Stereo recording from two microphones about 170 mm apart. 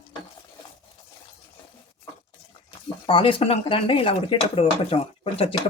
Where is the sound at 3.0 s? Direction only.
30° left (ahead or behind).